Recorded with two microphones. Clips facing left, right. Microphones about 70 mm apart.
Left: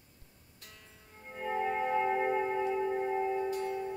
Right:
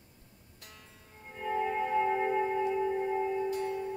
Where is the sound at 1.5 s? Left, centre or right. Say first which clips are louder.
Right 1 dB; centre.